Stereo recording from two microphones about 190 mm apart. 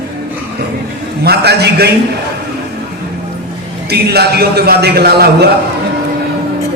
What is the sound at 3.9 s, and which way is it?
A man's voice, 60° right (ahead or behind).